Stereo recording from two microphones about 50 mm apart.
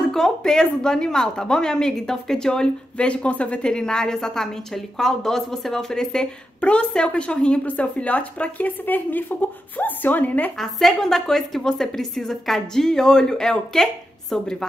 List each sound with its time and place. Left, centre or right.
0.4 s a woman's voice: centre
3.6 s a woman's voice: centre
6.6 s a woman's voice: left
10.6 s a woman's voice: centre